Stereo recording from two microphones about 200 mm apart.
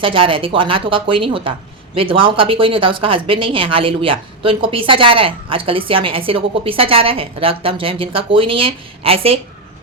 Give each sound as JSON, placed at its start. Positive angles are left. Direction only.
{"t": 0.0, "sound": "speech", "side_deg": -25}